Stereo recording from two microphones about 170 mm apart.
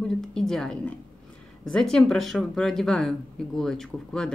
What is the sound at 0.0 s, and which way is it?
A woman's voice, 5° left (ahead or behind).